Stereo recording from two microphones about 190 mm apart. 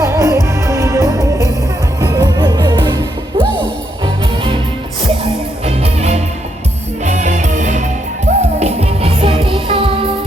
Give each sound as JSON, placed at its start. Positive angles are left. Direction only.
{"t": 0.0, "sound": "music", "side_deg": -15}
{"t": 5.6, "sound": "music", "side_deg": -35}